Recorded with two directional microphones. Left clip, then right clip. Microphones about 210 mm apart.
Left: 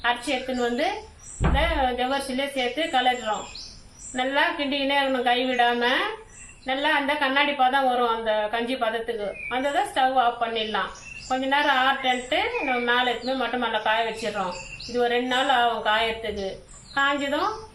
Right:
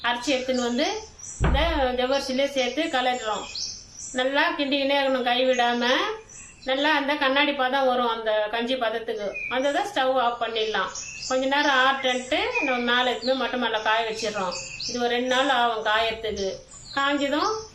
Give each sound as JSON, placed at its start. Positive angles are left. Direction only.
{"t": 0.0, "sound": "a woman's voice", "side_deg": -15}
{"t": 4.1, "sound": "a woman's voice", "side_deg": -15}
{"t": 11.3, "sound": "a woman's voice", "side_deg": -15}
{"t": 14.9, "sound": "a woman's voice", "side_deg": -15}